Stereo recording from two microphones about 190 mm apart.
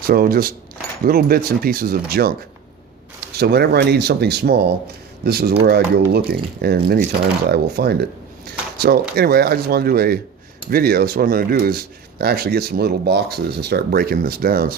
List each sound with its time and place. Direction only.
0.0 s speech: 50° right (ahead or behind)
8.4 s a sound: 55° right (ahead or behind)
9.1 s speech: 55° right (ahead or behind)